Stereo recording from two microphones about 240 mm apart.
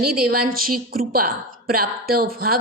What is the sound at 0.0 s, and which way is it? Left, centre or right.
A woman's voice, right.